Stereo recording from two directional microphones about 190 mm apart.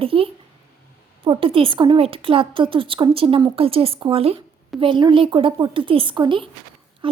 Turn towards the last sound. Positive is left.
turn(degrees=-25)  # may be behind; listen again after turning